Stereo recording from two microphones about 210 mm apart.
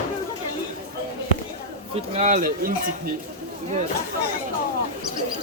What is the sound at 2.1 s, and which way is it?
Speech, 35° right (ahead or behind).